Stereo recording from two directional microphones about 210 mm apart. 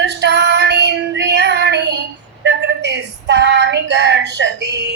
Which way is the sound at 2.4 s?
55° right (ahead or behind).